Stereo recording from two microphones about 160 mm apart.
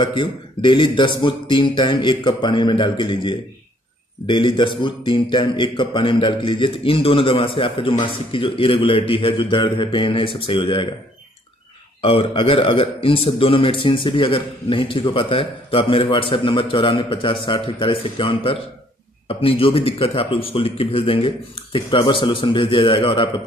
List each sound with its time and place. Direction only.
0.0 s a man's voice: 30° left (ahead or behind)
12.0 s a man's voice: 35° left (ahead or behind)